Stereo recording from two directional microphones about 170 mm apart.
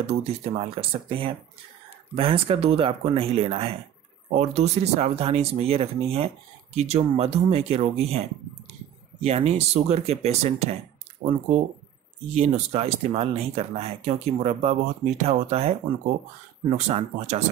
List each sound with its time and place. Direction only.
0.0 s speech: 35° right (ahead or behind)
12.4 s speech: 40° right (ahead or behind)
16.7 s speech: 40° right (ahead or behind)